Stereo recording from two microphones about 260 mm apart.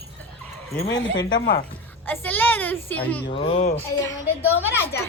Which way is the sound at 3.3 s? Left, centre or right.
Left.